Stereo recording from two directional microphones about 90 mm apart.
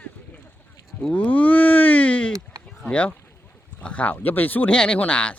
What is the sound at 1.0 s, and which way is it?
Speech, 15° left (ahead or behind).